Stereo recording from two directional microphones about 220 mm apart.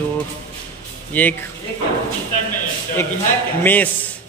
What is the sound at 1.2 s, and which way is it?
Speech, 10° left (ahead or behind).